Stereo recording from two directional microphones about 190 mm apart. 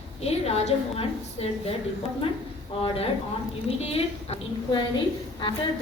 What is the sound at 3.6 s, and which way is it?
A woman's voice, 30° left (ahead or behind).